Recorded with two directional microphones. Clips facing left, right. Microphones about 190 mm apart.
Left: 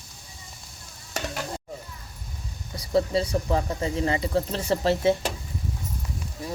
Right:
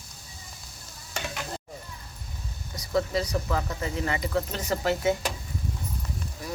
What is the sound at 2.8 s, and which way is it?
Speech, 30° left (ahead or behind).